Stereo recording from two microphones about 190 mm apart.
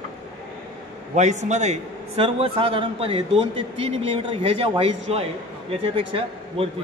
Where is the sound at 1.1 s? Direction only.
40° right (ahead or behind).